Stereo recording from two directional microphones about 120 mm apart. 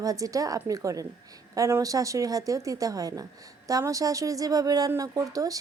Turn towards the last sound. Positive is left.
turn(degrees=-30)  # may be behind; listen again after turning